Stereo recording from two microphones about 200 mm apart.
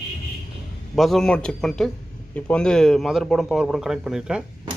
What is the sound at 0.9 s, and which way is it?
A man's voice, centre (ahead or behind).